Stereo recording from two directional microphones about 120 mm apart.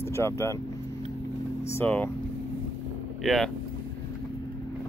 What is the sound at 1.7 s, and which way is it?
Speech, 15° left (ahead or behind).